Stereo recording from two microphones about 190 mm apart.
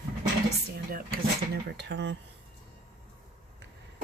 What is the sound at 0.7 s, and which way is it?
Speech, 50° right (ahead or behind).